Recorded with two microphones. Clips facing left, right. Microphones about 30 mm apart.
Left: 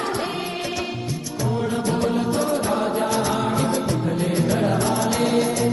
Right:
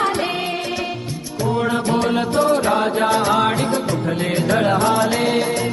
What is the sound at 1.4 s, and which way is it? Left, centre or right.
Music, right.